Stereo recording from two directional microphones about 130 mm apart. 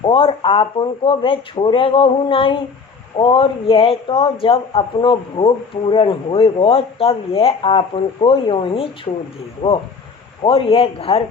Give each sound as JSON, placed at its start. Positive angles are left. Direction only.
{"t": 0.1, "sound": "speech", "side_deg": 45}
{"t": 9.6, "sound": "speech", "side_deg": 70}
{"t": 10.4, "sound": "speech", "side_deg": 45}